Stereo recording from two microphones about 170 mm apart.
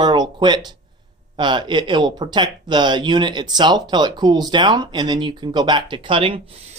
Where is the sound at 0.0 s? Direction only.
25° right (ahead or behind).